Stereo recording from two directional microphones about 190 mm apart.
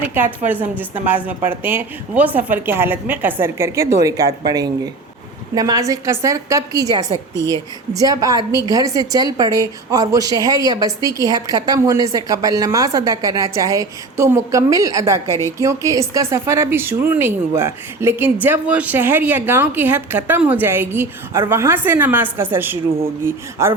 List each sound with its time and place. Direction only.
0.0 s a woman's voice: 10° right (ahead or behind)